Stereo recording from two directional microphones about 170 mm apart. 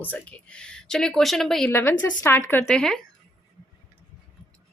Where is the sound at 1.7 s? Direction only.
10° left (ahead or behind).